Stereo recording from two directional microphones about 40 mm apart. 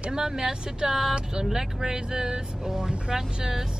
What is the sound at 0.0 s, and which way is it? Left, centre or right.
Speech, centre.